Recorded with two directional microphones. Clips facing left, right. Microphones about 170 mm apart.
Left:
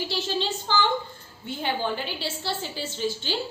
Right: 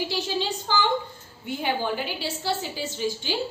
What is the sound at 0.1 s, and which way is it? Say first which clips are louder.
A woman's voice: even; 15° right (ahead or behind).